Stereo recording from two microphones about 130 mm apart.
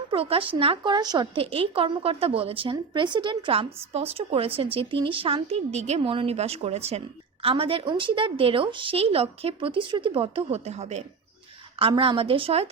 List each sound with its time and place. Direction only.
0.1 s a woman's voice: 45° right (ahead or behind)
0.9 s speech: 30° right (ahead or behind)
1.4 s a woman's voice: 45° right (ahead or behind)
11.8 s a woman's voice: 40° right (ahead or behind)